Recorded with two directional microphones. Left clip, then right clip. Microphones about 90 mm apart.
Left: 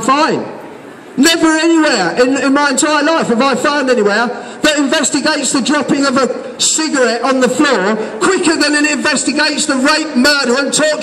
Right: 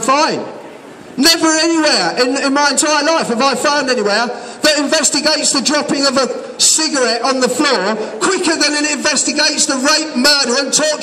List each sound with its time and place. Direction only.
1.2 s a man's voice: 25° right (ahead or behind)
5.1 s a man's voice: 5° left (ahead or behind)
5.9 s a man's voice: 25° right (ahead or behind)